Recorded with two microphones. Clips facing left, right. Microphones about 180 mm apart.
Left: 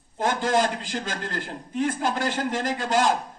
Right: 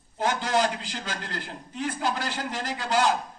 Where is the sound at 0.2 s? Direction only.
45° left (ahead or behind).